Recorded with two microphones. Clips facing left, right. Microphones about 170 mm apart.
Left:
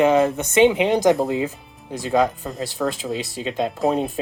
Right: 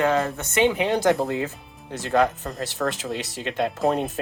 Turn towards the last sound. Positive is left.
turn(degrees=0)  # may be behind; listen again after turning